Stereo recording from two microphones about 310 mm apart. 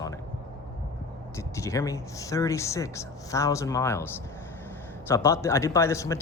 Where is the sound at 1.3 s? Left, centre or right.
Centre.